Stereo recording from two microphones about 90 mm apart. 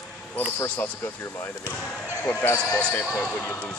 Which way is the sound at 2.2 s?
25° left (ahead or behind).